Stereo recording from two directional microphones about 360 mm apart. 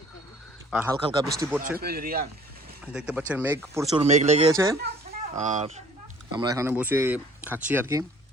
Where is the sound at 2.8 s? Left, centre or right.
Centre.